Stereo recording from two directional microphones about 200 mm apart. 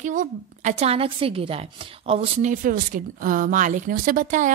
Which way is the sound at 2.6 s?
45° right (ahead or behind).